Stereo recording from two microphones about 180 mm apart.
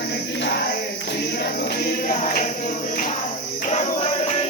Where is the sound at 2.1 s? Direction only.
50° left (ahead or behind).